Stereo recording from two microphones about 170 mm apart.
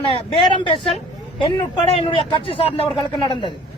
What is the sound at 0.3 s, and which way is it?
A man's voice, 30° left (ahead or behind).